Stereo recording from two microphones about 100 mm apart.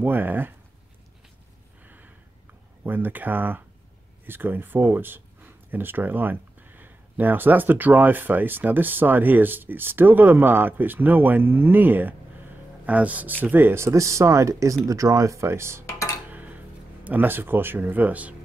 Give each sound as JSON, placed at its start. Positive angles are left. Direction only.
{"t": 0.0, "sound": "speech", "side_deg": -20}
{"t": 1.8, "sound": "gasp", "side_deg": -20}
{"t": 2.8, "sound": "speech", "side_deg": -20}
{"t": 16.3, "sound": "a sound", "side_deg": -15}
{"t": 17.0, "sound": "speech", "side_deg": -20}